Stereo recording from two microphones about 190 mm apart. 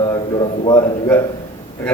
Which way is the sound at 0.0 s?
25° left (ahead or behind).